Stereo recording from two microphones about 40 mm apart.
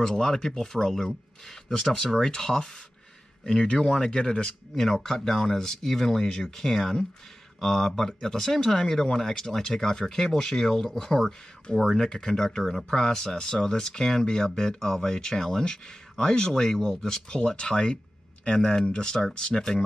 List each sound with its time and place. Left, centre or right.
0.0 s speech: centre
3.7 s speech: centre
4.7 s speech: centre
11.7 s speech: centre
12.9 s speech: centre